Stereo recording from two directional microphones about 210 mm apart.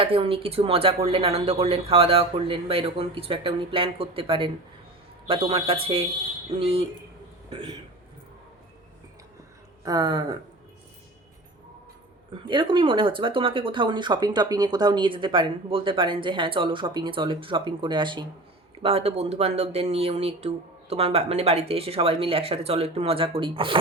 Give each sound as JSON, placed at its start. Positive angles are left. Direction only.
{"t": 0.0, "sound": "speech", "side_deg": -25}
{"t": 9.8, "sound": "speech", "side_deg": -20}
{"t": 12.3, "sound": "speech", "side_deg": -25}